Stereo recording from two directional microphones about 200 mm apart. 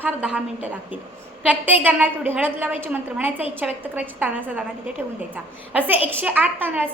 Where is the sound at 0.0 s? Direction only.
5° right (ahead or behind).